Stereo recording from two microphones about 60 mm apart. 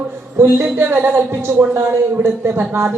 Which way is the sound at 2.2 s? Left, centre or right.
Right.